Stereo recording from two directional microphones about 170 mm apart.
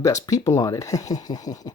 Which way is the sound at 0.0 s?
20° left (ahead or behind).